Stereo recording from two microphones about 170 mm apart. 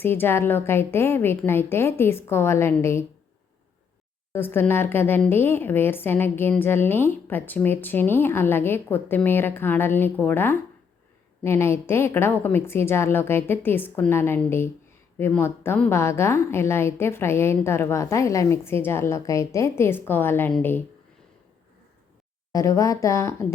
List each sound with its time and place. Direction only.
0.0 s a woman's voice: 10° left (ahead or behind)
4.3 s a woman's voice: 15° left (ahead or behind)
22.5 s a woman's voice: 20° left (ahead or behind)